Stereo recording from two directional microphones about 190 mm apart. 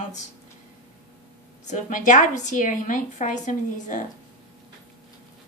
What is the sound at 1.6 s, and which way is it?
A woman's voice, 40° left (ahead or behind).